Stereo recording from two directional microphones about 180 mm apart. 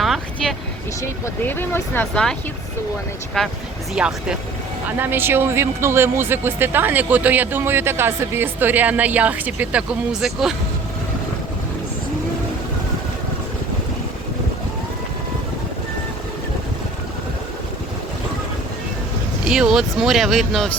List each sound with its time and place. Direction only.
0.0 s vehicle: centre (ahead or behind)
1.0 s speech: 10° left (ahead or behind)
3.4 s speech: 5° left (ahead or behind)
19.5 s speech: 5° right (ahead or behind)